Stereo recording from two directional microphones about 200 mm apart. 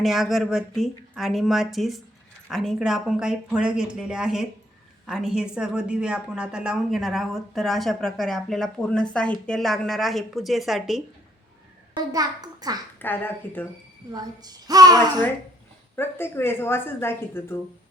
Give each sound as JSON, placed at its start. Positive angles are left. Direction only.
{"t": 0.0, "sound": "a woman's voice", "side_deg": 0}
{"t": 11.9, "sound": "a woman's voice", "side_deg": -20}
{"t": 13.0, "sound": "a woman's voice", "side_deg": 10}
{"t": 14.1, "sound": "a woman's voice", "side_deg": -20}
{"t": 16.0, "sound": "a woman's voice", "side_deg": 10}